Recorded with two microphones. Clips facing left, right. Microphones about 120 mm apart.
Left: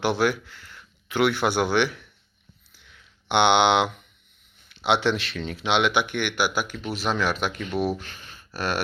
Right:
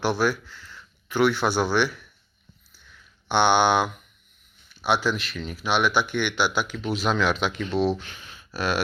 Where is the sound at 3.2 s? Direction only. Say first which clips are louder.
Left 1 dB; 20° left (ahead or behind).